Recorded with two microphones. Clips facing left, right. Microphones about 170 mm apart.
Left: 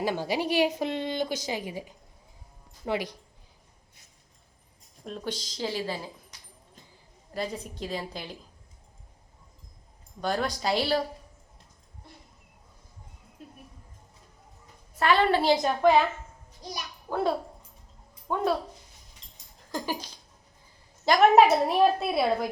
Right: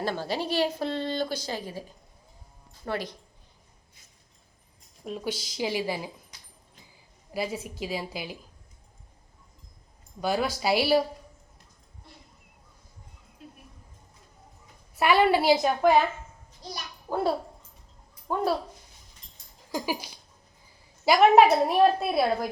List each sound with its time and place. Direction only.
0.0 s a woman's voice: 15° left (ahead or behind)
5.0 s a woman's voice: 5° right (ahead or behind)
7.3 s a woman's voice: 5° right (ahead or behind)
10.2 s a woman's voice: 5° right (ahead or behind)
14.9 s a woman's voice: 10° right (ahead or behind)
17.1 s a woman's voice: 15° right (ahead or behind)
19.2 s a sound: 25° left (ahead or behind)
19.7 s a woman's voice: 10° right (ahead or behind)